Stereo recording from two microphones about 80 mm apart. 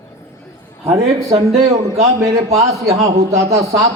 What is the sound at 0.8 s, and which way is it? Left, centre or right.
A man's voice, right.